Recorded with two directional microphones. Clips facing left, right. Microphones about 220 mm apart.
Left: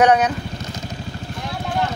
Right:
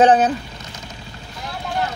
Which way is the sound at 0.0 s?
30° right (ahead or behind).